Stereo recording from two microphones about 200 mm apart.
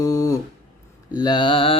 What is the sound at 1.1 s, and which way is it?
Speech, 20° left (ahead or behind).